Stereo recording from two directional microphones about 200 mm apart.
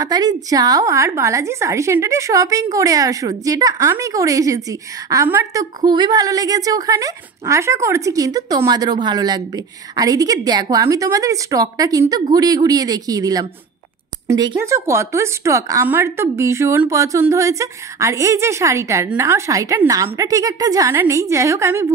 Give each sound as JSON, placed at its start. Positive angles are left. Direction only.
{"t": 0.0, "sound": "a woman's voice", "side_deg": -20}